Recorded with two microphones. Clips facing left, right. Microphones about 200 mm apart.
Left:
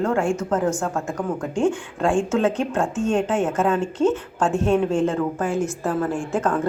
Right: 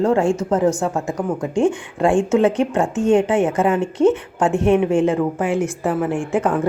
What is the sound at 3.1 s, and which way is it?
A woman's voice, 15° right (ahead or behind).